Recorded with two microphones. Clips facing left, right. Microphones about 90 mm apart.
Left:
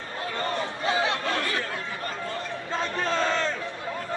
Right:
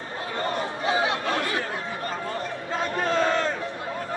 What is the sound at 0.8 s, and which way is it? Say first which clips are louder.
Chatter: right 1 dB; 20° right (ahead or behind).